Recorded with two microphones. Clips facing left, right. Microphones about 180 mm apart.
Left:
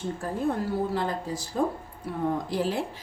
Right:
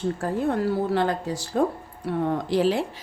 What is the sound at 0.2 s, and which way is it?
A woman's voice, 75° right (ahead or behind).